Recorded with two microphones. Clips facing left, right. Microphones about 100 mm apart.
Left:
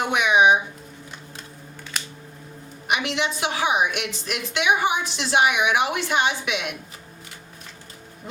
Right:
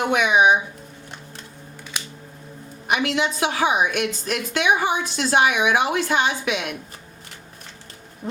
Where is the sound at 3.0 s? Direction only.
45° right (ahead or behind).